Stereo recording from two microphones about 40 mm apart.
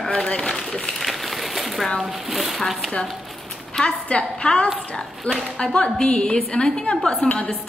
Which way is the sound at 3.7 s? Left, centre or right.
Left.